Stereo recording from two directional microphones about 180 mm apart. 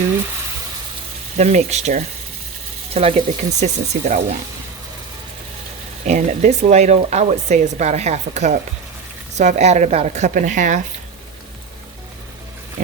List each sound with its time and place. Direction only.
1.4 s speech: 40° right (ahead or behind)
6.1 s speech: 40° right (ahead or behind)